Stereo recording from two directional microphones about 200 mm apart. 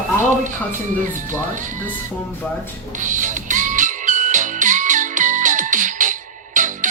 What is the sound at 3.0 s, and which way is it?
Music, 40° right (ahead or behind).